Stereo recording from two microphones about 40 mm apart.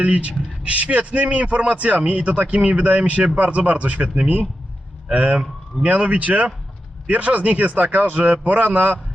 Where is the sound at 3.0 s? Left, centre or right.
Right.